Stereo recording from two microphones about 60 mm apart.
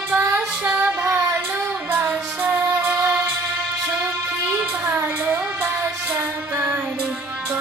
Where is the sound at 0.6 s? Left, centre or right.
Right.